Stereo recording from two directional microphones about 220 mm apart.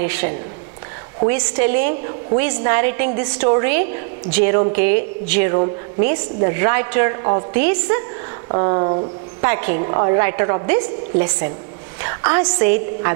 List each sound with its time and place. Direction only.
0.0 s a woman's voice: 10° right (ahead or behind)
8.5 s a woman's voice: 25° right (ahead or behind)
9.5 s a woman's voice: 15° right (ahead or behind)